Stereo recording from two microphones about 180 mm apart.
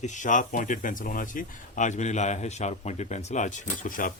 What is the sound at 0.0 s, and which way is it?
Speech, 45° left (ahead or behind).